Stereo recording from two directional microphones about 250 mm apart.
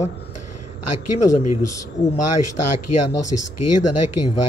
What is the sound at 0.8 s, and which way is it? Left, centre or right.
Speech, left.